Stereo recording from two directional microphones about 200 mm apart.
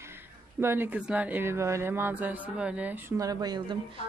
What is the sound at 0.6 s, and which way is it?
A woman's voice, 10° right (ahead or behind).